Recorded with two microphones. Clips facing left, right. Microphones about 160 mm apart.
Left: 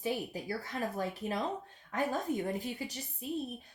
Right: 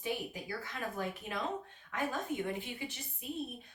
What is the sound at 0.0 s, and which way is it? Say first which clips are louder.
A woman's voice: left 3 dB; 35° left (ahead or behind).